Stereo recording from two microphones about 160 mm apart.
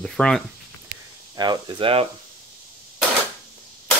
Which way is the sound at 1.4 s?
30° right (ahead or behind).